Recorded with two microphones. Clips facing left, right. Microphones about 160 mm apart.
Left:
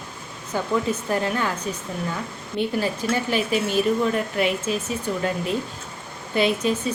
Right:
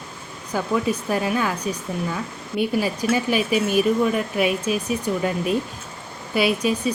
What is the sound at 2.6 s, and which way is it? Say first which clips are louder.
Speech: right 2 dB; 10° right (ahead or behind).